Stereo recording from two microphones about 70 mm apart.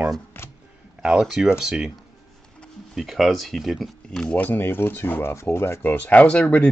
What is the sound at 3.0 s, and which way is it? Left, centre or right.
Speech, centre.